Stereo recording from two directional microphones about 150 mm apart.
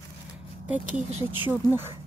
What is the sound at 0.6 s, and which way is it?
Speech, 10° right (ahead or behind).